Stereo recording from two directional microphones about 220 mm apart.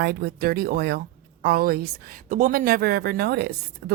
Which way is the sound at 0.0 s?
45° right (ahead or behind).